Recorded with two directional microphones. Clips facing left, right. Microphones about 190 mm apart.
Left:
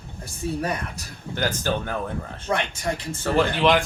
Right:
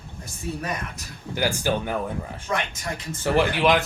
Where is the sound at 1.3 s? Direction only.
10° right (ahead or behind).